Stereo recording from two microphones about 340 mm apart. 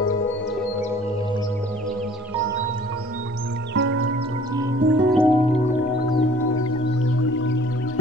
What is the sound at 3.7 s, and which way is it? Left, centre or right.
Music, right.